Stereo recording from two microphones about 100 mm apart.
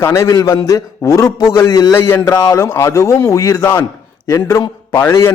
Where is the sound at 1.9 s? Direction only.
25° left (ahead or behind).